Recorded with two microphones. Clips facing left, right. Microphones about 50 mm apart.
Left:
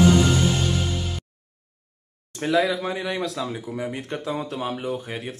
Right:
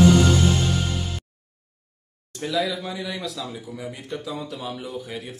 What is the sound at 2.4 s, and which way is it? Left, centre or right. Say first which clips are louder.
Speech: left 4 dB; left.